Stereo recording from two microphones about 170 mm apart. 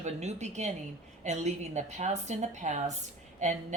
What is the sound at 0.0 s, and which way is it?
Speech, 40° right (ahead or behind).